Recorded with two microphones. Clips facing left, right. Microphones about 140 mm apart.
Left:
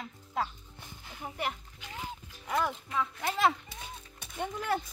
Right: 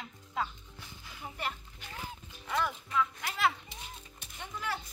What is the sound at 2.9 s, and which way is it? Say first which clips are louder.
Speech: left 1 dB; 30° left (ahead or behind).